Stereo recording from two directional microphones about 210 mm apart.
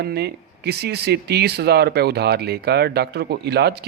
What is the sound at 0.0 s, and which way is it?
Speech, 50° right (ahead or behind).